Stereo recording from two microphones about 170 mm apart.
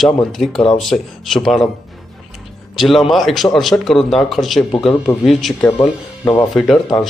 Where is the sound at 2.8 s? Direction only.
Centre (ahead or behind).